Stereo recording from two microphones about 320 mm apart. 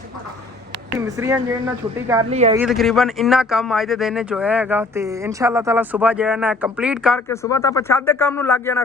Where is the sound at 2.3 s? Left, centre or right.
Centre.